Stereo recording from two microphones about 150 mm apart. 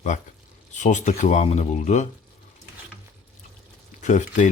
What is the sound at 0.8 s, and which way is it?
Speech, 55° left (ahead or behind).